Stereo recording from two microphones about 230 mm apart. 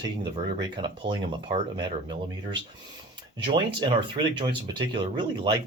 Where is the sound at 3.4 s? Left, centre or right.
Right.